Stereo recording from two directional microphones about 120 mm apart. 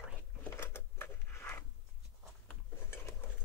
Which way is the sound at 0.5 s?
20° left (ahead or behind).